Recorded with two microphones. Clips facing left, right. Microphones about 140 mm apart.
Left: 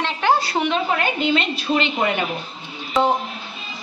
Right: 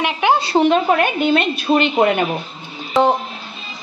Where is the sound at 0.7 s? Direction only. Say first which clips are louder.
Right 7 dB; 55° right (ahead or behind).